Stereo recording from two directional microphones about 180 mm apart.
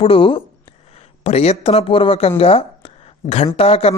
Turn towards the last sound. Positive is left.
turn(degrees=35)  # may be behind; listen again after turning